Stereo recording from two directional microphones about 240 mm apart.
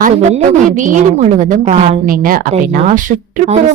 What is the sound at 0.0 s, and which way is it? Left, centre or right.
A woman's voice, right.